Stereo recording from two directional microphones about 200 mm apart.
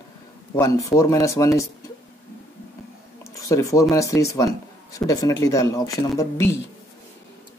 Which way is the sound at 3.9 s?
15° left (ahead or behind).